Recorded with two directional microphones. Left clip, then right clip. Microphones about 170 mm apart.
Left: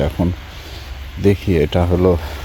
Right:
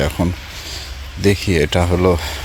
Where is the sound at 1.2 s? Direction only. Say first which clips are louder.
Even; 15° left (ahead or behind).